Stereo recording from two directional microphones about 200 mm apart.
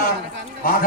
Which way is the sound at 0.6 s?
45° left (ahead or behind).